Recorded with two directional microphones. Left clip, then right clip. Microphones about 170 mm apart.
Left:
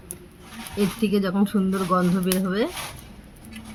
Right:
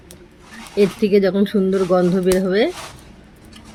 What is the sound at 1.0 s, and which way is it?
Speech, 5° right (ahead or behind).